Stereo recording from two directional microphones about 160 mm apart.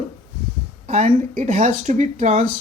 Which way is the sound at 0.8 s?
50° right (ahead or behind).